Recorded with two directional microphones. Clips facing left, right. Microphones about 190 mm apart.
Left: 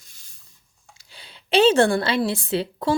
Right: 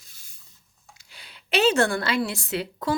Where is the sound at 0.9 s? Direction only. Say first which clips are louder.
Left 3 dB; 30° left (ahead or behind).